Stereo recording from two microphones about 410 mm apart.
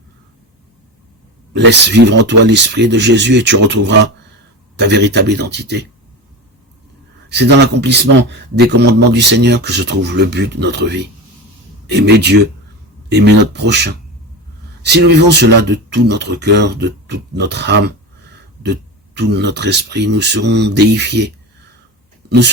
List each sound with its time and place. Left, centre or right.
1.5 s speech: right
7.3 s speech: right
22.2 s a sound: right